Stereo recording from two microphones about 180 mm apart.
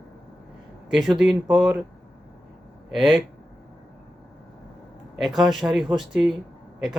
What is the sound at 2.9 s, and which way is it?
Speech, centre (ahead or behind).